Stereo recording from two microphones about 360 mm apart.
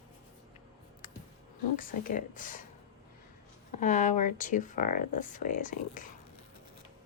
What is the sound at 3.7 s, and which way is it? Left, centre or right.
Speech, left.